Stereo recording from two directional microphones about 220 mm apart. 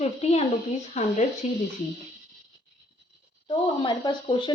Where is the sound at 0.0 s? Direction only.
30° left (ahead or behind).